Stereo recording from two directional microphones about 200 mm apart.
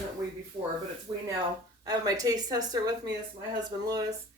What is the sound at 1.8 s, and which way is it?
Speech, 20° right (ahead or behind).